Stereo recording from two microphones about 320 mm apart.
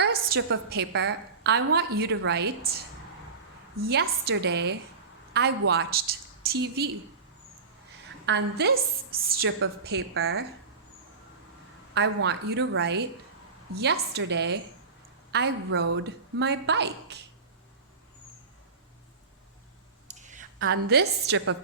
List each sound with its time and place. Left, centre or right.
0.0 s a woman's voice: right
3.8 s a woman's voice: right
8.3 s a woman's voice: right
11.9 s a woman's voice: right
20.1 s a woman's voice: right